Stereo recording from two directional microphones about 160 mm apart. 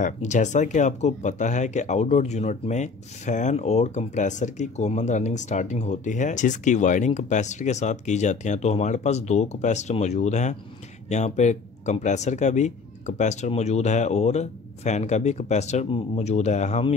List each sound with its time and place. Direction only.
0.0 s speech: 50° left (ahead or behind)